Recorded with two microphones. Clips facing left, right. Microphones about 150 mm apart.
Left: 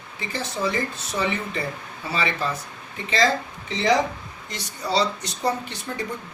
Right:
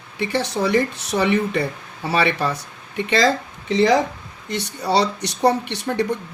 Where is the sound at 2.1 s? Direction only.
70° right (ahead or behind).